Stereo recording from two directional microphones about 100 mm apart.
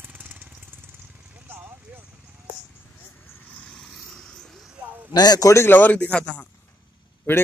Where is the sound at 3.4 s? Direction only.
5° left (ahead or behind).